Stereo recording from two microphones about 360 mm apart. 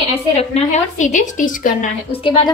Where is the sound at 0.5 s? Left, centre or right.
Centre.